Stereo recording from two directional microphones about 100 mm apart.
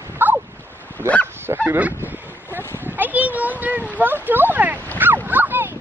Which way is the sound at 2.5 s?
20° right (ahead or behind).